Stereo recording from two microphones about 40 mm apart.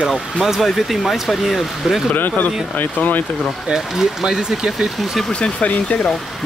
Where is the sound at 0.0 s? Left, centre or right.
Centre.